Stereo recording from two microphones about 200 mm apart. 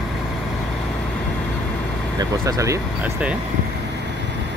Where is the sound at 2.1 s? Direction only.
15° right (ahead or behind).